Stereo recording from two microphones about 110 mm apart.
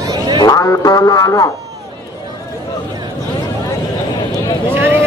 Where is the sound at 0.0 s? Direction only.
35° right (ahead or behind).